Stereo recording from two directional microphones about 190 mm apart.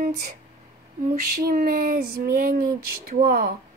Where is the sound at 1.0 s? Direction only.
50° right (ahead or behind).